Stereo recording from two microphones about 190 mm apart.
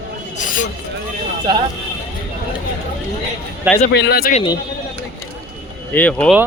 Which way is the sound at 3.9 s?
55° left (ahead or behind).